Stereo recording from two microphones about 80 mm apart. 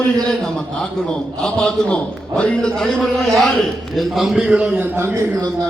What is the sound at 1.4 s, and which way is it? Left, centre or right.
A man's voice, centre.